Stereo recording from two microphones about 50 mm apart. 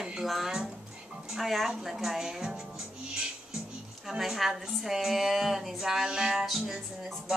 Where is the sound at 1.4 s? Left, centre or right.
Centre.